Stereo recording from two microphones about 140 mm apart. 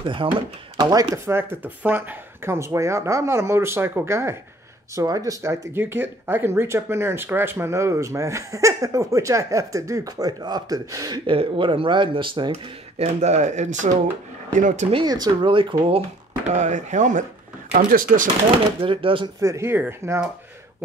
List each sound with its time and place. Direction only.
0.0 s speech: 35° right (ahead or behind)
11.2 s speech: 40° right (ahead or behind)
13.2 s speech: 55° right (ahead or behind)
14.9 s speech: 35° right (ahead or behind)
16.4 s speech: 55° right (ahead or behind)
17.7 s speech: 75° right (ahead or behind)
18.8 s speech: 40° right (ahead or behind)
19.4 s speech: 20° right (ahead or behind)